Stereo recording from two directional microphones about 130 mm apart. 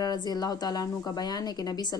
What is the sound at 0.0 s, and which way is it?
A woman's voice, 30° left (ahead or behind).